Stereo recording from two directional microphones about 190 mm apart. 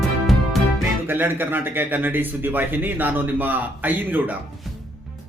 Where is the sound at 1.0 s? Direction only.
10° right (ahead or behind).